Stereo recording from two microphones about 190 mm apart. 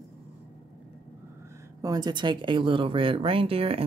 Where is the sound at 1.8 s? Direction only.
20° right (ahead or behind).